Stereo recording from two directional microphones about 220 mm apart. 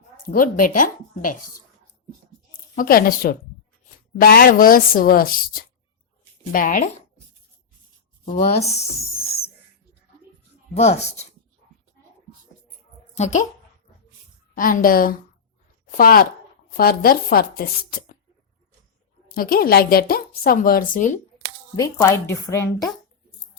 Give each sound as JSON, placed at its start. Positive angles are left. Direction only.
{"t": 0.3, "sound": "speech", "side_deg": 40}
{"t": 2.7, "sound": "speech", "side_deg": 40}
{"t": 8.2, "sound": "speech", "side_deg": 25}
{"t": 9.2, "sound": "a sound", "side_deg": 45}
{"t": 10.8, "sound": "speech", "side_deg": 30}
{"t": 13.1, "sound": "speech", "side_deg": 35}
{"t": 14.5, "sound": "speech", "side_deg": 40}
{"t": 19.3, "sound": "speech", "side_deg": 40}
{"t": 21.8, "sound": "a woman's voice", "side_deg": 15}